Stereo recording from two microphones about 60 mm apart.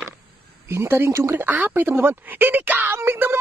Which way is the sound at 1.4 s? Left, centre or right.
Right.